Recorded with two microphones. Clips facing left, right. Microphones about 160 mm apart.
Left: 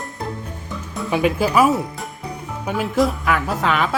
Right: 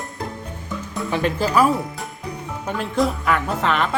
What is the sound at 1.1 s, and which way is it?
Speech, 10° left (ahead or behind).